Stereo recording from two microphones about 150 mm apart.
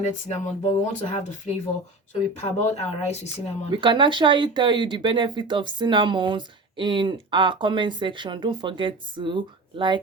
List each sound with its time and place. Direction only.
0.0 s speech: 50° left (ahead or behind)
3.7 s speech: 35° right (ahead or behind)